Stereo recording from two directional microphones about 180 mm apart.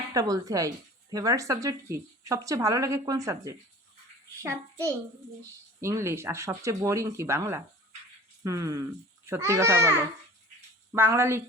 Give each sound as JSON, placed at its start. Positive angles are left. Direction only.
{"t": 0.1, "sound": "speech", "side_deg": -20}
{"t": 10.9, "sound": "speech", "side_deg": -15}